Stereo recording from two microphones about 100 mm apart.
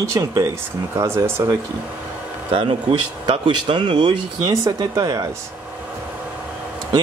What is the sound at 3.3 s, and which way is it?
Speech, 50° right (ahead or behind).